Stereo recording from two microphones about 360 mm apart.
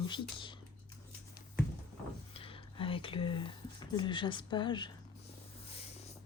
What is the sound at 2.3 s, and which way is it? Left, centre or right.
Whispering, centre.